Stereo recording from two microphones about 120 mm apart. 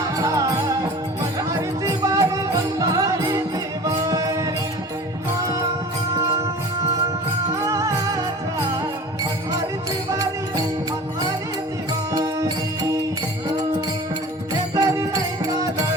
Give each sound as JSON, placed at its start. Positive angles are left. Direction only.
{"t": 0.2, "sound": "music", "side_deg": -30}
{"t": 7.6, "sound": "music", "side_deg": -25}
{"t": 12.1, "sound": "music", "side_deg": -30}
{"t": 14.8, "sound": "music", "side_deg": -25}